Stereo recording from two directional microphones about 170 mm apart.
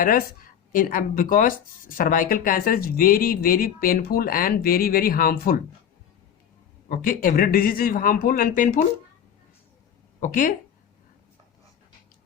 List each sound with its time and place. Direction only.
0.0 s speech: 55° left (ahead or behind)
6.8 s speech: 55° left (ahead or behind)
10.2 s speech: 50° left (ahead or behind)